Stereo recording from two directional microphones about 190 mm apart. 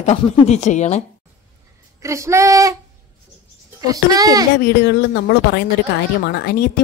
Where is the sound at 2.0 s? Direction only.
15° right (ahead or behind).